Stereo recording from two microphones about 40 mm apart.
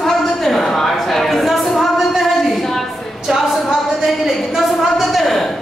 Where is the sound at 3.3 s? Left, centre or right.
Centre.